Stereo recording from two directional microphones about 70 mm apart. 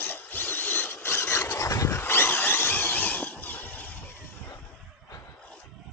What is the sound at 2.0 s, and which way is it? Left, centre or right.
Vehicle, left.